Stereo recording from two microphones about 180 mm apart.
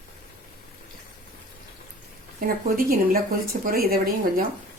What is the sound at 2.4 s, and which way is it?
A woman's voice, 55° right (ahead or behind).